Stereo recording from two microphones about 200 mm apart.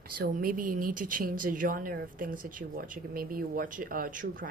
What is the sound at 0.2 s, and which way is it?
Speech, 45° right (ahead or behind).